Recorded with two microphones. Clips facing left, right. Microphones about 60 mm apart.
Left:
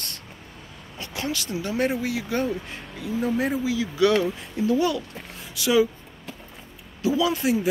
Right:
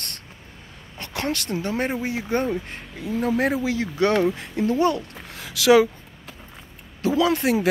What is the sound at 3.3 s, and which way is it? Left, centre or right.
Speech, right.